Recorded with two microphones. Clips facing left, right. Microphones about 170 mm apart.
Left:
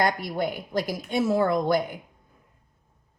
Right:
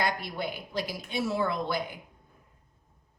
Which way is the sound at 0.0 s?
45° left (ahead or behind).